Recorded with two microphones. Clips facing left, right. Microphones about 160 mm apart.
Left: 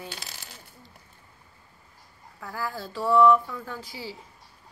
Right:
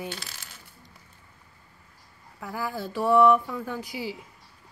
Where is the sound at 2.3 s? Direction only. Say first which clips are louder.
Right 2 dB; 15° right (ahead or behind).